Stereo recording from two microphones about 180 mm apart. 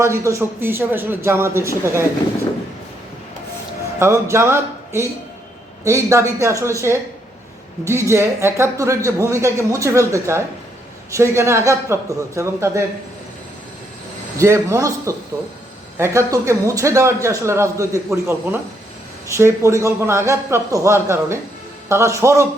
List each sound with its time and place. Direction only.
0.0 s a man's voice: 15° right (ahead or behind)
4.0 s a man's voice: 15° right (ahead or behind)
14.3 s a man's voice: 15° right (ahead or behind)